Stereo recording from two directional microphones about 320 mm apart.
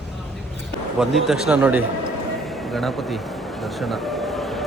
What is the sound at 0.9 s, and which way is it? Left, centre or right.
Speech, centre.